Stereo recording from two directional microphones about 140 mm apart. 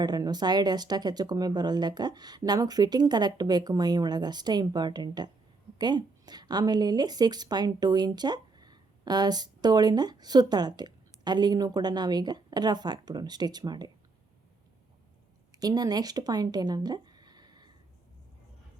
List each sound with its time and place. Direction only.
0.0 s a woman's voice: 30° right (ahead or behind)
15.5 s speech: 30° right (ahead or behind)